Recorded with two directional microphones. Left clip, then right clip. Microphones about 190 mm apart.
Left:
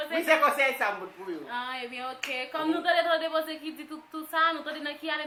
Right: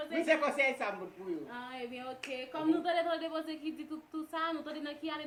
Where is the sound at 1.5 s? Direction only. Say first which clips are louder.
Left 9 dB; 15° left (ahead or behind).